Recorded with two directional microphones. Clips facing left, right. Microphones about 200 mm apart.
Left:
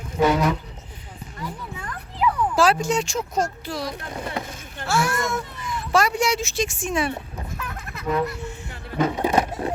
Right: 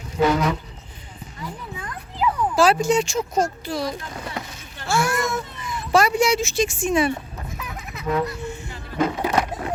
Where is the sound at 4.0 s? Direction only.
50° left (ahead or behind).